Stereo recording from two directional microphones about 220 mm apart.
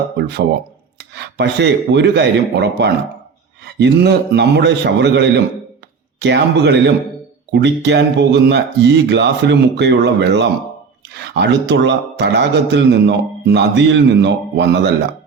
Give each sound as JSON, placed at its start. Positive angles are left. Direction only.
{"t": 0.9, "sound": "speech", "side_deg": -50}